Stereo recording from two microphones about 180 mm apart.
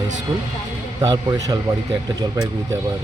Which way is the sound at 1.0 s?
20° right (ahead or behind).